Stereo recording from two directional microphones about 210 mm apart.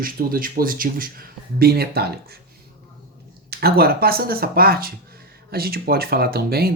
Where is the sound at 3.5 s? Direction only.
45° right (ahead or behind).